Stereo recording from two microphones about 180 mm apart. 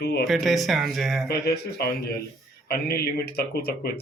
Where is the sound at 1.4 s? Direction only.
60° left (ahead or behind).